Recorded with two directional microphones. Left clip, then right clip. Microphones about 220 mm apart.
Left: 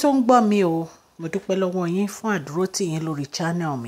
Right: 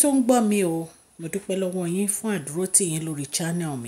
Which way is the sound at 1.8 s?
5° right (ahead or behind).